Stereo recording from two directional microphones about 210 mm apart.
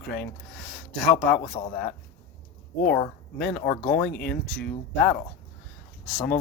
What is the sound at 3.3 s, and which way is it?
Speech, 5° left (ahead or behind).